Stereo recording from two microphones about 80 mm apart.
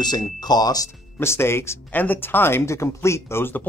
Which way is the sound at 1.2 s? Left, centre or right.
Left.